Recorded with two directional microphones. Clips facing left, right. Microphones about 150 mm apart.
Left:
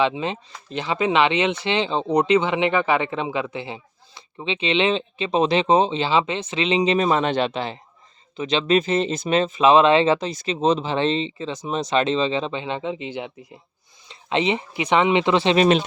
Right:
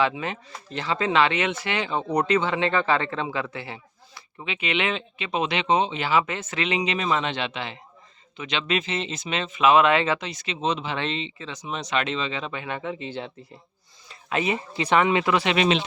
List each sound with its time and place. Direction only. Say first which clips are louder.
0.0 s speech: left 3 dB; 20° left (ahead or behind)
15.5 s speech: left 7 dB; 45° left (ahead or behind)